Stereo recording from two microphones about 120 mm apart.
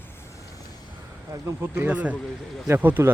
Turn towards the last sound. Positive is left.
turn(degrees=-15)  # may be behind; listen again after turning